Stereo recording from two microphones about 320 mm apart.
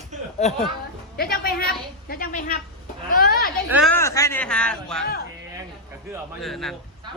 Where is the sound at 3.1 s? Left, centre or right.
Left.